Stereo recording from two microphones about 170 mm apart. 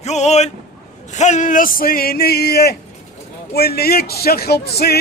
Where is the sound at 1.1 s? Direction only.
45° left (ahead or behind); by 5.0 s 70° left (ahead or behind).